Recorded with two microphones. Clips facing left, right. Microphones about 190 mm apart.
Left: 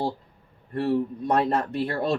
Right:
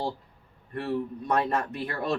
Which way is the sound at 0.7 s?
35° left (ahead or behind).